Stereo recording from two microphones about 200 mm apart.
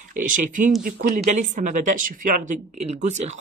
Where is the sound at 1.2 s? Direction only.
35° right (ahead or behind).